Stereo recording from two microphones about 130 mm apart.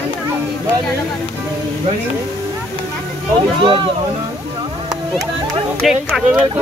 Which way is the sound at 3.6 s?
40° right (ahead or behind).